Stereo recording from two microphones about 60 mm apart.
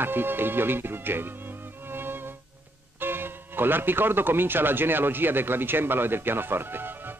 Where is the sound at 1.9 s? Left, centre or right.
Right.